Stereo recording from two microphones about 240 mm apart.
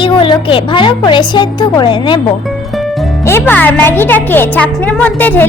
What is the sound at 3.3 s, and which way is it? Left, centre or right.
A woman's voice, centre.